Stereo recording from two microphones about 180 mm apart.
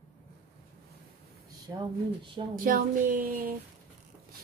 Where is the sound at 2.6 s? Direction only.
50° right (ahead or behind).